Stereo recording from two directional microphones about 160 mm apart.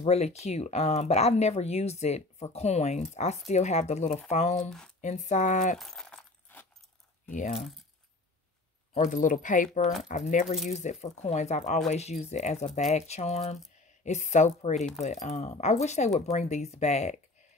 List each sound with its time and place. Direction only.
0.0 s speech: 40° left (ahead or behind)
4.6 s speech: 5° left (ahead or behind)
5.0 s speech: 50° left (ahead or behind)
5.8 s keys jangling: centre (ahead or behind)
7.2 s speech: 50° left (ahead or behind)
8.9 s speech: 50° left (ahead or behind)